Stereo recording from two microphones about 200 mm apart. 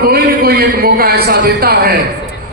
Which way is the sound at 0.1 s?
50° right (ahead or behind).